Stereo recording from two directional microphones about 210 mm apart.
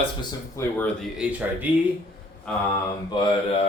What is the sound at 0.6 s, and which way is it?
Speech, 15° left (ahead or behind).